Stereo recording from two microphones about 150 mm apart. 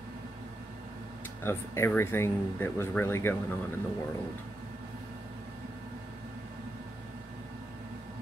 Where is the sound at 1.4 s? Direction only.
15° left (ahead or behind).